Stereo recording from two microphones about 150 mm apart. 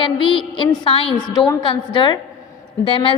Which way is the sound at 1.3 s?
30° left (ahead or behind).